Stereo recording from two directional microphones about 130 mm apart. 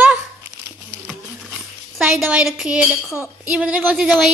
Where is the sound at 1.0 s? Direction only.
5° right (ahead or behind).